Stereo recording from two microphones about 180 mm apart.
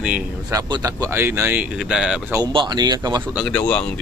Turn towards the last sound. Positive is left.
turn(degrees=5)  # may be behind; listen again after turning